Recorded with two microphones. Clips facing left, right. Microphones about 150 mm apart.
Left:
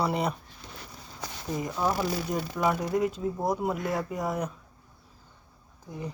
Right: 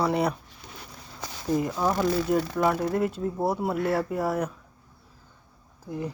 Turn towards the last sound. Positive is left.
turn(degrees=-5)  # may be behind; listen again after turning